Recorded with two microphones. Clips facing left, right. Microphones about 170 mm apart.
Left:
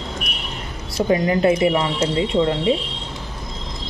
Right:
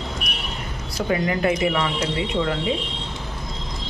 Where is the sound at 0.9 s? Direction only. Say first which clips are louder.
Left 5 dB; 25° left (ahead or behind).